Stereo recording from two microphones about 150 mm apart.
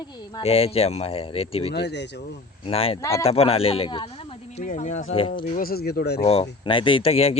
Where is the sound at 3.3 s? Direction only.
40° left (ahead or behind).